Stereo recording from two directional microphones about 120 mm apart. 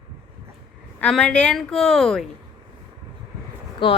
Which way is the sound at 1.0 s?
5° left (ahead or behind).